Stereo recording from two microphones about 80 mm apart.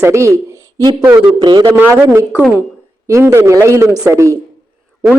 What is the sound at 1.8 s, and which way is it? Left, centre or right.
Speech, right.